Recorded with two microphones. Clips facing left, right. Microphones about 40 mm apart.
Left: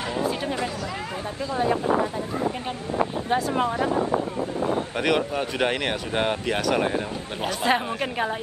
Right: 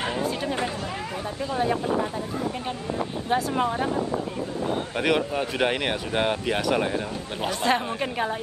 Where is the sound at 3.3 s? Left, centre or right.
Centre.